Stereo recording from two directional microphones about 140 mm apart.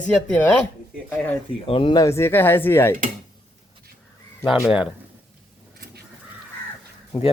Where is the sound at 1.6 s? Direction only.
40° left (ahead or behind).